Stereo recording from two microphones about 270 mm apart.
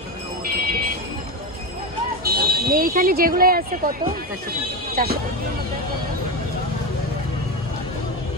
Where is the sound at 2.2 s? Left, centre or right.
Right.